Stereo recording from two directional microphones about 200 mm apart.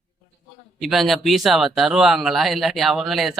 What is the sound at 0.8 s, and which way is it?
Speech, centre (ahead or behind).